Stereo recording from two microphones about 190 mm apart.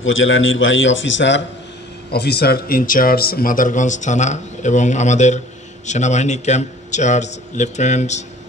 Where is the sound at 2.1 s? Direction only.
60° left (ahead or behind); by 8.3 s 35° left (ahead or behind).